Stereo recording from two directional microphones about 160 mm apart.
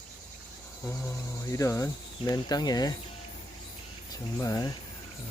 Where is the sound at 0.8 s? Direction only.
15° left (ahead or behind).